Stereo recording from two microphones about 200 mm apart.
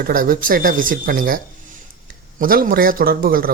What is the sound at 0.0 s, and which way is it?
Speech, 45° right (ahead or behind).